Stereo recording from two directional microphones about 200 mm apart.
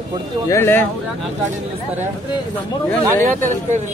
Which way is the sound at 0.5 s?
10° left (ahead or behind).